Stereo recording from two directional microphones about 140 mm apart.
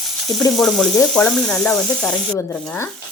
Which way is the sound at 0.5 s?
Centre (ahead or behind).